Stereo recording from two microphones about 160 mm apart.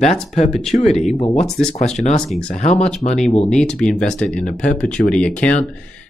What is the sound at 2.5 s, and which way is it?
Speech, 45° left (ahead or behind).